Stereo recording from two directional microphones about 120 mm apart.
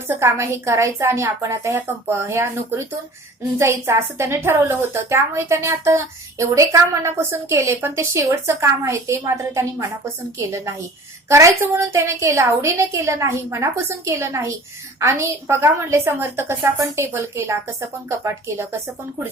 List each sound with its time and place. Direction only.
0.1 s a woman's voice: 20° right (ahead or behind)